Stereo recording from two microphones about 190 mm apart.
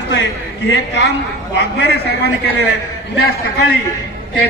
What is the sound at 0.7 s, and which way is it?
A man's voice, 65° left (ahead or behind).